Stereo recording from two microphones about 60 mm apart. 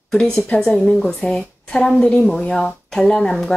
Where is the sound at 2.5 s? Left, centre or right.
Centre.